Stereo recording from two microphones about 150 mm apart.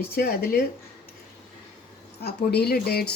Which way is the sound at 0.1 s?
90° left.